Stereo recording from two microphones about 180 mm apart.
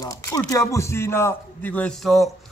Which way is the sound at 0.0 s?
20° left (ahead or behind).